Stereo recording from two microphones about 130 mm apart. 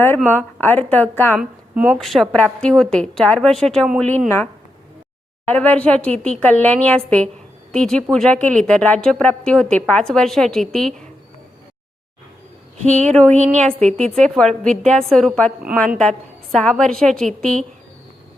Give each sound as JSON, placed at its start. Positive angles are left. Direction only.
{"t": 0.3, "sound": "a woman's voice", "side_deg": 15}
{"t": 1.4, "sound": "a woman's voice", "side_deg": -10}
{"t": 2.0, "sound": "a woman's voice", "side_deg": 0}
{"t": 5.5, "sound": "a woman's voice", "side_deg": 10}
{"t": 12.8, "sound": "speech", "side_deg": -65}
{"t": 13.9, "sound": "a woman's voice", "side_deg": 5}